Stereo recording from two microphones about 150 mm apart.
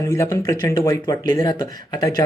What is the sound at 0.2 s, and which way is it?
Speech, 25° left (ahead or behind).